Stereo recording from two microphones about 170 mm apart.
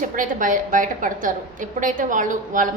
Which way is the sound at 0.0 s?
50° right (ahead or behind).